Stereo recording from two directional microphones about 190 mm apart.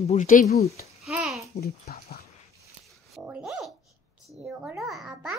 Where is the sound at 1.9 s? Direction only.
55° left (ahead or behind).